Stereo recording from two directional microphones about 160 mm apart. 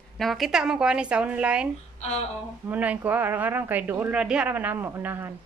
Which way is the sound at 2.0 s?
40° left (ahead or behind).